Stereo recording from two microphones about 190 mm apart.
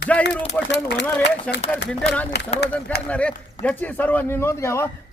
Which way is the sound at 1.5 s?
5° left (ahead or behind).